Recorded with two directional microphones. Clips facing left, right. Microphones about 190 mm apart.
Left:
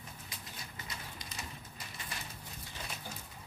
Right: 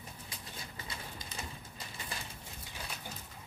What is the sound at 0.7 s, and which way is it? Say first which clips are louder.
Pigeon: right 1 dB; 30° right (ahead or behind).